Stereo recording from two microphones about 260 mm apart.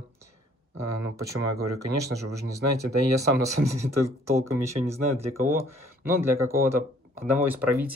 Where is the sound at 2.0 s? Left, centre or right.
Centre.